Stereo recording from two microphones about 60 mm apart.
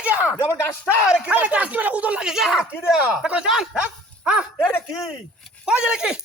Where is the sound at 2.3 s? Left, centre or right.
Centre.